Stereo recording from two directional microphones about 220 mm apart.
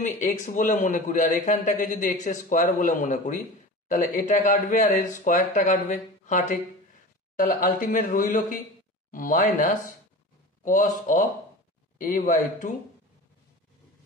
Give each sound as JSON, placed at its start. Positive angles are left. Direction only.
{"t": 0.0, "sound": "a man's voice", "side_deg": 35}